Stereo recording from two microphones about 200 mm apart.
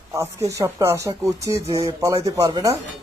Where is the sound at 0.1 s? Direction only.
15° right (ahead or behind).